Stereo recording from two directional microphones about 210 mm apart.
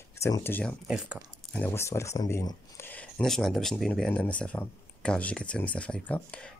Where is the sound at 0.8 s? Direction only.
Centre (ahead or behind).